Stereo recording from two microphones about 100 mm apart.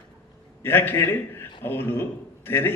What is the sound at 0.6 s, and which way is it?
A man's voice, 20° left (ahead or behind).